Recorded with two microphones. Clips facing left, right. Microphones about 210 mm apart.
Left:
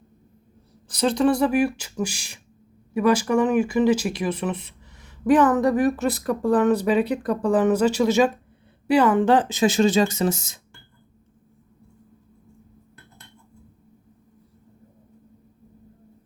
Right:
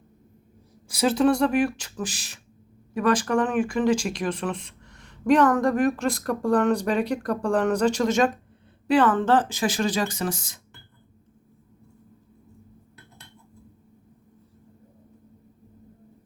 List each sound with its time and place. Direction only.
0.9 s speech: 5° right (ahead or behind); by 10.6 s 25° left (ahead or behind)